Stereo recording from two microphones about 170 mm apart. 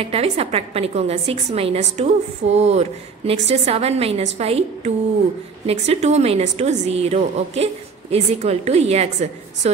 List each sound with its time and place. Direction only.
0.0 s a woman's voice: 35° right (ahead or behind)